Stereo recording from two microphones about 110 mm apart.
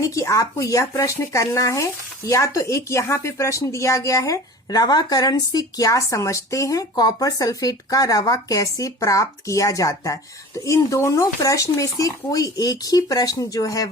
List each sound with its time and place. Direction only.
0.0 s speech: 30° left (ahead or behind)